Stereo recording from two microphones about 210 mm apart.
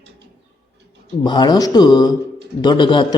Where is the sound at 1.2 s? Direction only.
20° left (ahead or behind).